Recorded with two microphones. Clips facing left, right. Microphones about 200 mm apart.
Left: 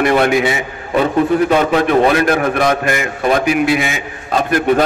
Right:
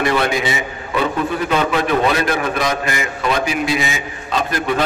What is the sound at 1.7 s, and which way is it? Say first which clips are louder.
A man's voice: left 5 dB; 50° left (ahead or behind).